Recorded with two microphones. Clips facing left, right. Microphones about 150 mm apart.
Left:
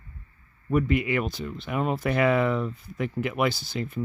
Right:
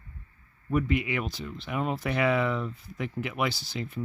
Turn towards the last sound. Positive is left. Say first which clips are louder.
# left 5 dB
turn(degrees=50)  # may be behind; listen again after turning